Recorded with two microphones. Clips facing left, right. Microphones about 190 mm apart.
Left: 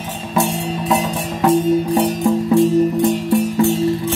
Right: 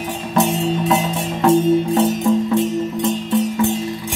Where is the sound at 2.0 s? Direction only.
20° right (ahead or behind).